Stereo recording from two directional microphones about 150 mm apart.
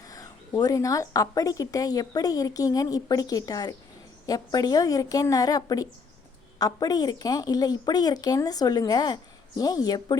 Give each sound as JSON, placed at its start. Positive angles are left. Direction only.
{"t": 0.1, "sound": "speech", "side_deg": 25}